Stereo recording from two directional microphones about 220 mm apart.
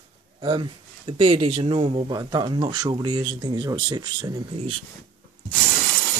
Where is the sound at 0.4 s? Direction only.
20° right (ahead or behind).